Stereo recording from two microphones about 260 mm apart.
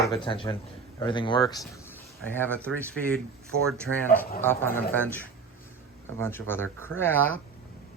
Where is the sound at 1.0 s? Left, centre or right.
Centre.